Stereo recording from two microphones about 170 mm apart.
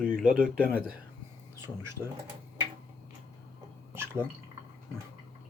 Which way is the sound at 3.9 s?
15° right (ahead or behind).